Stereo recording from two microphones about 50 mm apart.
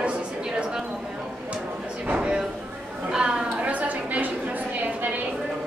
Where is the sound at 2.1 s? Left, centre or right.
Right.